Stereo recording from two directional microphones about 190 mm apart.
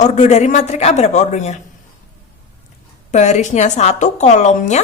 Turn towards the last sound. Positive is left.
turn(degrees=35)  # may be behind; listen again after turning